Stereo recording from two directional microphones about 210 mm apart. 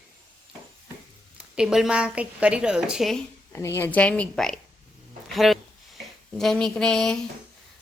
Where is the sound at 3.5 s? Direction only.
10° left (ahead or behind).